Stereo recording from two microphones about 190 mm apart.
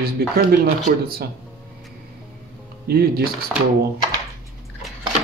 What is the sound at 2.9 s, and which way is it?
Speech, 55° right (ahead or behind).